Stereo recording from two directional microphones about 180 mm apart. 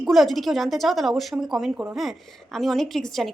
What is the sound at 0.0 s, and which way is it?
A woman's voice, centre (ahead or behind).